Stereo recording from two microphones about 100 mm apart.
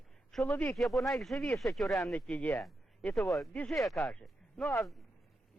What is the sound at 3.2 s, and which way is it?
Speech, centre (ahead or behind).